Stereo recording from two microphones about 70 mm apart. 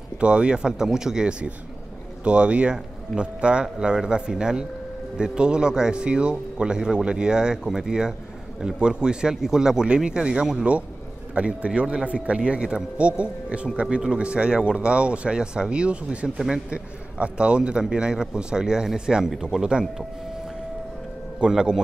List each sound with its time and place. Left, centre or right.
0.2 s a man's voice: centre
21.4 s a man's voice: centre